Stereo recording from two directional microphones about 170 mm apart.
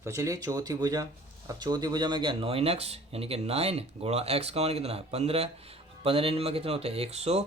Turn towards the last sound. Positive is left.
turn(degrees=-40)  # may be behind; listen again after turning